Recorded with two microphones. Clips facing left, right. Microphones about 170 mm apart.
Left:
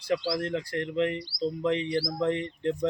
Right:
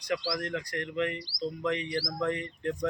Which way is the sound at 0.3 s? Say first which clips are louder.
Left 4 dB; 30° left (ahead or behind).